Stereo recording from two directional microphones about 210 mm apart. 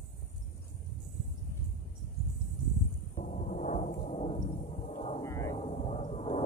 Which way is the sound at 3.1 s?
35° left (ahead or behind).